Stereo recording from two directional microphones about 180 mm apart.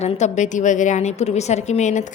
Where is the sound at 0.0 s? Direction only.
40° left (ahead or behind).